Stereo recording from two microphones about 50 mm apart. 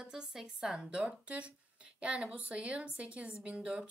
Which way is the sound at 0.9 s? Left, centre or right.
Right.